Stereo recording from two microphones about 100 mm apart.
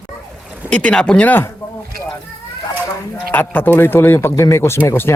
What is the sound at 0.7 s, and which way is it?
Speech, 10° left (ahead or behind).